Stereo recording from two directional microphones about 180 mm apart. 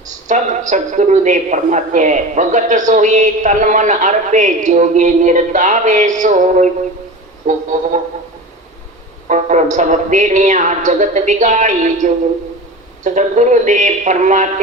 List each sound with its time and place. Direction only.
0.3 s speech: 45° right (ahead or behind)
9.3 s speech: 40° right (ahead or behind)